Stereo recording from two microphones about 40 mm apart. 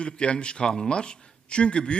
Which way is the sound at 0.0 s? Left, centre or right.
Left.